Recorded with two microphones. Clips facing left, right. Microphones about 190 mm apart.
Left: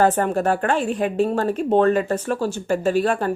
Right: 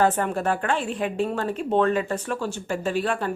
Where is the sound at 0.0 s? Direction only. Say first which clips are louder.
Left 4 dB; 45° left (ahead or behind).